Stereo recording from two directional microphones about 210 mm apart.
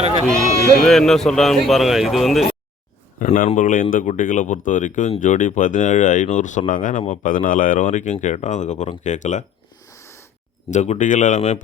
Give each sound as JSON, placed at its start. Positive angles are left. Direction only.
{"t": 0.3, "sound": "speech", "side_deg": 0}
{"t": 3.2, "sound": "speech", "side_deg": 35}
{"t": 9.9, "sound": "a sound", "side_deg": 15}
{"t": 10.7, "sound": "speech", "side_deg": 35}